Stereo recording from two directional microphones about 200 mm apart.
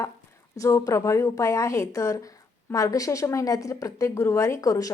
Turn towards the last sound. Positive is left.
turn(degrees=15)  # may be behind; listen again after turning